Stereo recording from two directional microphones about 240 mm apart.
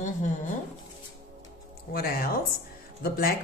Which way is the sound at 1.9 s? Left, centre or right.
Left.